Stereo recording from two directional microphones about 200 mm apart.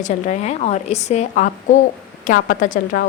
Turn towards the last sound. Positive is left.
turn(degrees=45)  # may be behind; listen again after turning